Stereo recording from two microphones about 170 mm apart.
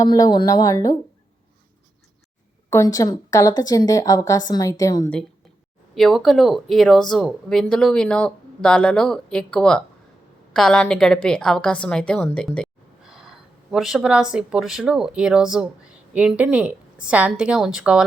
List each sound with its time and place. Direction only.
0.0 s a woman's voice: 20° left (ahead or behind)
2.6 s a woman's voice: 20° left (ahead or behind)
5.9 s a woman's voice: centre (ahead or behind)